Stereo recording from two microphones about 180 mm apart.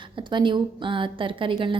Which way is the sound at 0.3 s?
25° right (ahead or behind).